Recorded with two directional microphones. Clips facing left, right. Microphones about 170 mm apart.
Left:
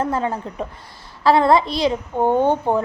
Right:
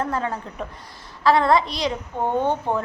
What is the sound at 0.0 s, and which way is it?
A child's voice, 25° left (ahead or behind).